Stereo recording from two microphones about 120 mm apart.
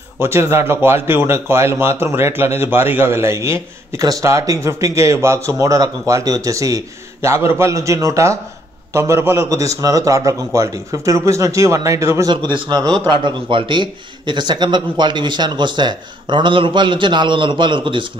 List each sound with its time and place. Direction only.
0.2 s speech: 20° right (ahead or behind)
12.3 s a man's voice: 40° right (ahead or behind)